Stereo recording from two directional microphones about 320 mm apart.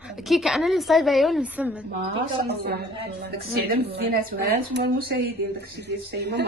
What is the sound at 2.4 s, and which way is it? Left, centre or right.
A woman's voice, right.